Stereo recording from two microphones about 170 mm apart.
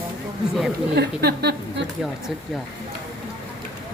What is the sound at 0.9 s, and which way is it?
Speech, 75° right (ahead or behind).